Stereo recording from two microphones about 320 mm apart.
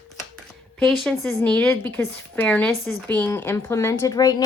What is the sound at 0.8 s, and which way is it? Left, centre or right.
A woman's voice, centre.